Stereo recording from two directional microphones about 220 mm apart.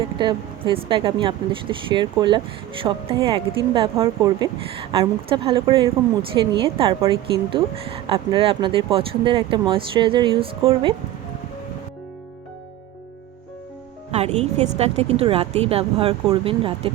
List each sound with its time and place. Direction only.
0.2 s a woman's voice: 20° right (ahead or behind)
14.1 s a woman's voice: 30° right (ahead or behind)